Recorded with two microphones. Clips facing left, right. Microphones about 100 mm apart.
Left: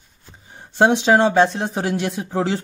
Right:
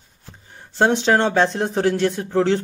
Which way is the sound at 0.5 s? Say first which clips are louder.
Left 2 dB; 15° left (ahead or behind).